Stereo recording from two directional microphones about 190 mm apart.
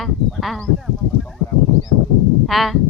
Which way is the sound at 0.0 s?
Centre (ahead or behind).